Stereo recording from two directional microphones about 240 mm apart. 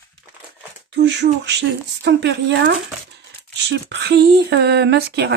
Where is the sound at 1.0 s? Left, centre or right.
Right.